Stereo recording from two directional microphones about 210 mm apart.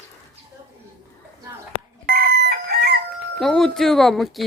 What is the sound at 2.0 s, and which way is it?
Chicken, 50° right (ahead or behind).